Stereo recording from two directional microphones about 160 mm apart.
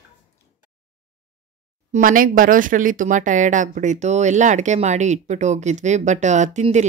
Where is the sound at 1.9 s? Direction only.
60° right (ahead or behind).